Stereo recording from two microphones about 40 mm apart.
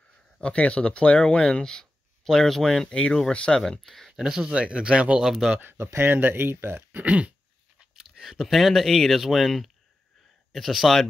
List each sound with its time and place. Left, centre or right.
0.4 s speech: left; by 2.9 s centre
2.9 s speech: left
3.8 s speech: centre
4.2 s speech: centre
4.6 s speech: right
5.6 s speech: right
7.0 s throat clearing: right
7.9 s speech: centre